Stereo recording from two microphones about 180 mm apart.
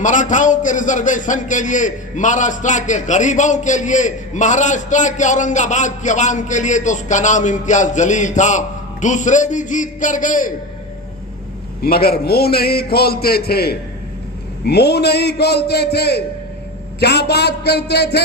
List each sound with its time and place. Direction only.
0.0 s a man's voice: 45° left (ahead or behind)
11.8 s a man's voice: 60° left (ahead or behind)